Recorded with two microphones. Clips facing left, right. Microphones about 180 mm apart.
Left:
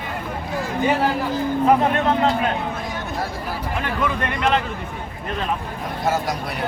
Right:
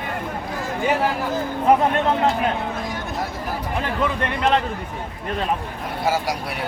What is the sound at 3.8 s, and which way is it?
Speech, 30° right (ahead or behind).